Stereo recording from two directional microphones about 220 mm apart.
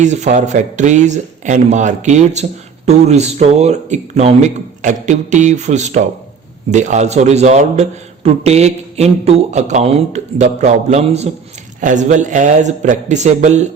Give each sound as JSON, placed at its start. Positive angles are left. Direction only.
{"t": 0.0, "sound": "speech", "side_deg": -30}